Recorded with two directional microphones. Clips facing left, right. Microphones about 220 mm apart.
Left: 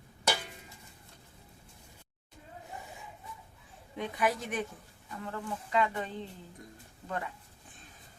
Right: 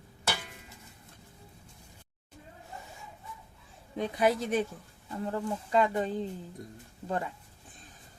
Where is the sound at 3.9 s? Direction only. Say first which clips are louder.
Right 5 dB; 30° right (ahead or behind).